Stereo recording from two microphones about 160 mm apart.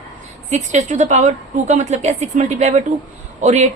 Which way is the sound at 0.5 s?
45° right (ahead or behind).